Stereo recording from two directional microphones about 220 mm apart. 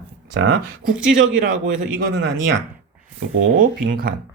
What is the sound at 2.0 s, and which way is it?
Speech, 50° right (ahead or behind).